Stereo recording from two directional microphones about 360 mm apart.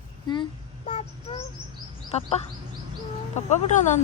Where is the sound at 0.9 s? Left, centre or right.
Centre.